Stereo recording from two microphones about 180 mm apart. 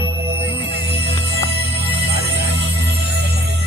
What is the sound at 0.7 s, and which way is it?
Music, 65° right (ahead or behind).